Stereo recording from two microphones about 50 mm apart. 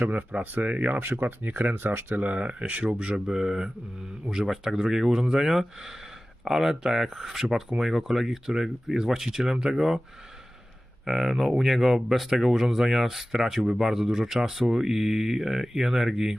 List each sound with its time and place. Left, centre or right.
0.0 s speech: right
0.9 s speech: right
3.2 s speech: centre
11.0 s speech: centre